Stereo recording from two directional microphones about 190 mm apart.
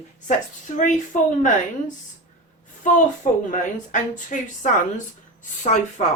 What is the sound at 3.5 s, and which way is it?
A woman's voice, 40° left (ahead or behind).